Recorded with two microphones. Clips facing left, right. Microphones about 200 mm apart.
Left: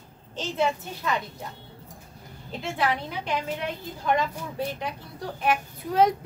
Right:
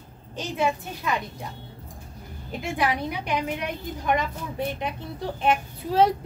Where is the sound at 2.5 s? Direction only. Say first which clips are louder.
Right 1 dB; 15° right (ahead or behind).